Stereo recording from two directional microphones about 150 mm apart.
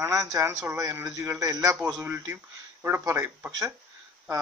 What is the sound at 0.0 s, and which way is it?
A man's voice, 20° right (ahead or behind).